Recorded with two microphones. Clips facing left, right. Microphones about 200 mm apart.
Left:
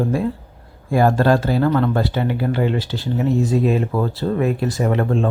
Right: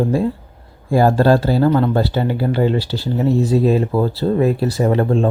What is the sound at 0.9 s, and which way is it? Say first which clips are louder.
Speech: right 2 dB; 30° right (ahead or behind).